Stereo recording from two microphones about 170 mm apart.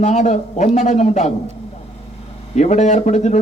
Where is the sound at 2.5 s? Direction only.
40° left (ahead or behind).